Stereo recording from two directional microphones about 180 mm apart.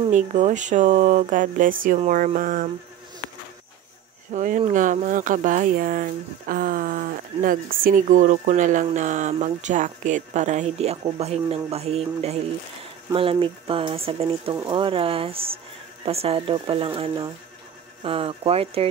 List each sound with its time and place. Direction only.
0.1 s speech: 40° right (ahead or behind)
4.3 s speech: 40° right (ahead or behind)